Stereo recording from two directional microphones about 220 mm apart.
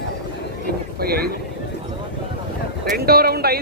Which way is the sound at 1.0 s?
45° right (ahead or behind).